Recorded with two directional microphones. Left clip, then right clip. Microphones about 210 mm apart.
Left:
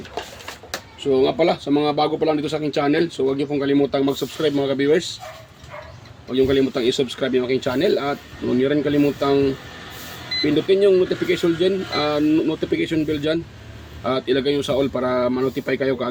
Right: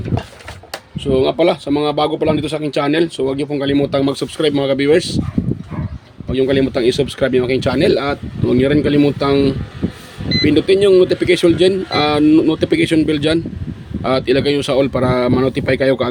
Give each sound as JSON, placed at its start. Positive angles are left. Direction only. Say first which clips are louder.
{"t": 0.9, "sound": "speech", "louder": "right 3 dB", "side_deg": -50}
{"t": 6.3, "sound": "speech", "louder": "right 3 dB", "side_deg": -50}